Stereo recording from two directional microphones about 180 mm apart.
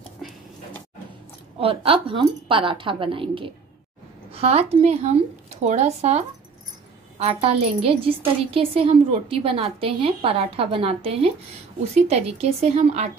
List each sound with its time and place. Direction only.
1.6 s a woman's voice: 30° right (ahead or behind)